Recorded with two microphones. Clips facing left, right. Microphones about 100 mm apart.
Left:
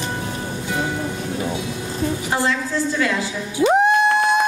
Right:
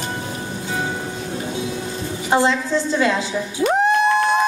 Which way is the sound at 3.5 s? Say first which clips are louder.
Left 3 dB; 10° left (ahead or behind).